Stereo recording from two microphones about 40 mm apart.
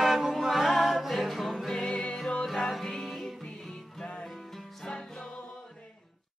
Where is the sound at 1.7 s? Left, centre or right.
Centre.